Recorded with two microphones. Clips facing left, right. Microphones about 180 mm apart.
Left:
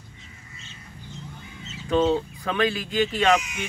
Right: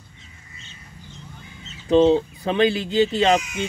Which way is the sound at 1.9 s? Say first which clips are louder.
Right 6 dB; 25° right (ahead or behind).